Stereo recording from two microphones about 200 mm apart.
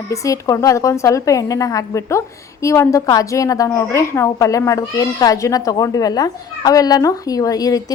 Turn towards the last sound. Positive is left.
turn(degrees=20)  # may be behind; listen again after turning